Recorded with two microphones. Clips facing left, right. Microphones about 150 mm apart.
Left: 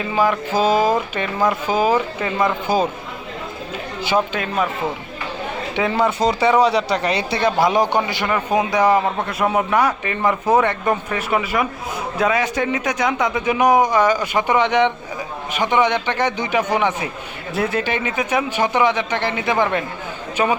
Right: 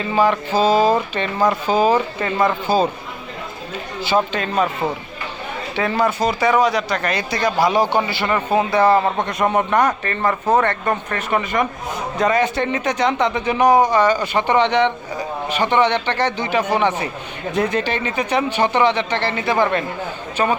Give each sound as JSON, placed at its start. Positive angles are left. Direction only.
{"t": 0.1, "sound": "a man's voice", "side_deg": 10}
{"t": 4.0, "sound": "a man's voice", "side_deg": 15}
{"t": 5.7, "sound": "speech", "side_deg": 15}
{"t": 7.4, "sound": "a man's voice", "side_deg": 20}